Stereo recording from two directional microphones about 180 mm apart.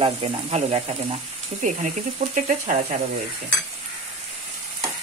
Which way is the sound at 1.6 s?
45° right (ahead or behind).